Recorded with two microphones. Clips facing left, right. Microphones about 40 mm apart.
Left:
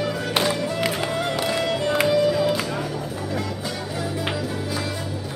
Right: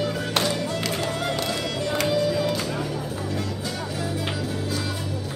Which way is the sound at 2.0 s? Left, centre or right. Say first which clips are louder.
Left 3 dB; centre.